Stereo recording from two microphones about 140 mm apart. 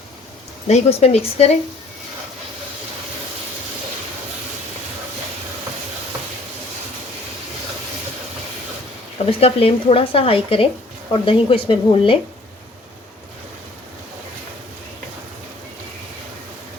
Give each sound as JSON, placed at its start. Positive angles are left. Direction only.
{"t": 0.7, "sound": "speech", "side_deg": 45}
{"t": 9.1, "sound": "speech", "side_deg": 45}